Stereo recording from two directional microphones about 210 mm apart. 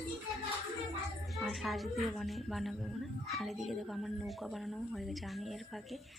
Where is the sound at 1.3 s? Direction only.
Centre (ahead or behind).